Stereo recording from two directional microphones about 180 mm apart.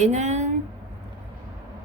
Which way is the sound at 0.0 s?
40° right (ahead or behind).